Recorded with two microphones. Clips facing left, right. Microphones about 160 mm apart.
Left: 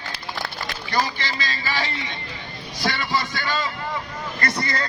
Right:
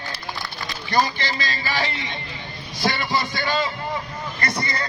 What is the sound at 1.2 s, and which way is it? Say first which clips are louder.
Speech: right 2 dB; 40° right (ahead or behind).